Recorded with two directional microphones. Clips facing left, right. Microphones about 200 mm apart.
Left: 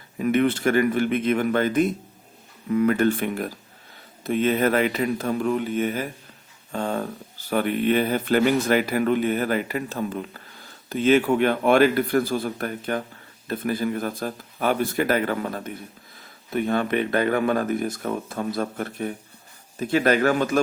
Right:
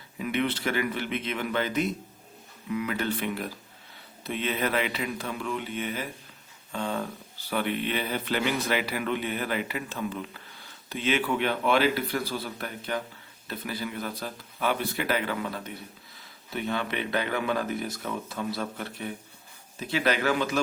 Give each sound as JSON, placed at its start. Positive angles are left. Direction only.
{"t": 0.2, "sound": "speech", "side_deg": 50}